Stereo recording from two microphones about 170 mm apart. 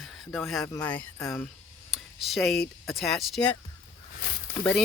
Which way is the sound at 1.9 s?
Centre (ahead or behind).